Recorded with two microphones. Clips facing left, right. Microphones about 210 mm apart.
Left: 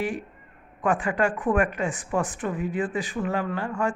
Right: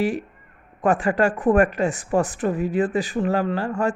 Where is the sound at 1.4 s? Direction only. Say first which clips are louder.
Right 6 dB; 40° right (ahead or behind).